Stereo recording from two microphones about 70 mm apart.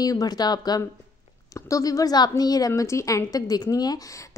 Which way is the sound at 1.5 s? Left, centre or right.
Left.